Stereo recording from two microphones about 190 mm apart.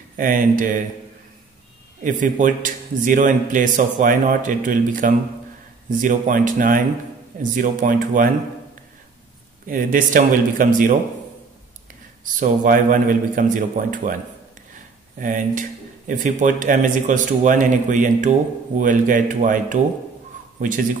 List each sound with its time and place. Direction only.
0.2 s a man's voice: 45° right (ahead or behind)
2.0 s a man's voice: 45° right (ahead or behind)
9.7 s a man's voice: 45° right (ahead or behind)
12.4 s a man's voice: 45° right (ahead or behind)
15.1 s a man's voice: 45° right (ahead or behind)